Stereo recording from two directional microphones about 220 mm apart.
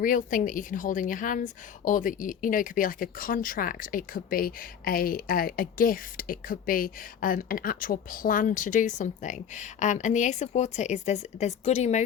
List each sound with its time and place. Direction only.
0.0 s a woman's voice: 40° left (ahead or behind)